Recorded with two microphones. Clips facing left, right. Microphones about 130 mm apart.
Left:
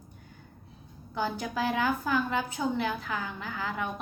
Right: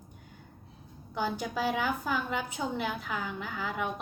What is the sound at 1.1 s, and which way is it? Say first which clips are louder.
A woman's voice: left 1 dB; 15° right (ahead or behind).